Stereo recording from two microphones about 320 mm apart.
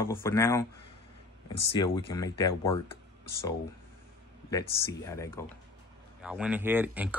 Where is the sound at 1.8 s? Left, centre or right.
Centre.